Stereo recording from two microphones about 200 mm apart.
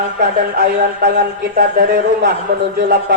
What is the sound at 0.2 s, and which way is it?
A man's voice, 50° right (ahead or behind).